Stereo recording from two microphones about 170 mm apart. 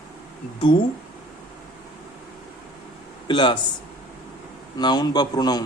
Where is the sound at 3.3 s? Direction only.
25° left (ahead or behind).